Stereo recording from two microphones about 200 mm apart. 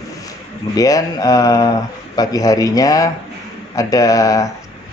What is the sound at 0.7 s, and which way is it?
A man's voice, 20° left (ahead or behind).